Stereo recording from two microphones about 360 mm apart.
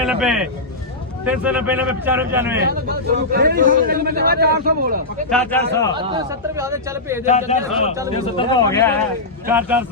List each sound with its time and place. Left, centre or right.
0.0 s speech: centre
2.6 s a man's voice: right
5.3 s speech: centre
5.9 s speech: centre
7.3 s a man's voice: centre
9.5 s speech: centre